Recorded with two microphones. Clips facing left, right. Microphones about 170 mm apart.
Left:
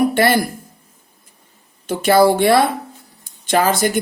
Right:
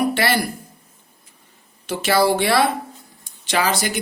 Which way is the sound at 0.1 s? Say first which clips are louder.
Left 5 dB; 50° left (ahead or behind).